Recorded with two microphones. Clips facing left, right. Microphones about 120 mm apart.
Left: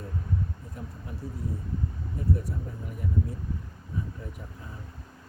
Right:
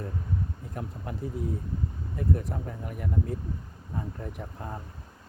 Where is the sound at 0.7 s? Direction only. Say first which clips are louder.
Right 4 dB; 65° right (ahead or behind).